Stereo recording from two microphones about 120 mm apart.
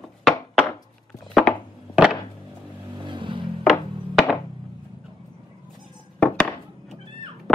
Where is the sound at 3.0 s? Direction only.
40° right (ahead or behind).